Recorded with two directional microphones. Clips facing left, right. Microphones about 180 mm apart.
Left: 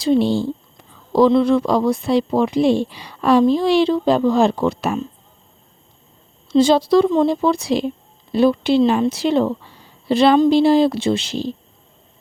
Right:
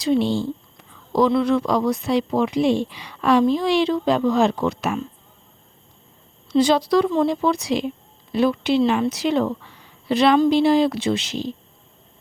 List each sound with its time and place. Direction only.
0.0 s speech: 35° left (ahead or behind)
6.5 s speech: 25° left (ahead or behind)